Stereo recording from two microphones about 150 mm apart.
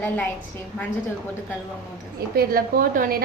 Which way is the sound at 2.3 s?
80° right.